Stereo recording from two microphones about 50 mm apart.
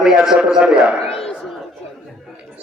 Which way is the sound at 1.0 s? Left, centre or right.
Centre.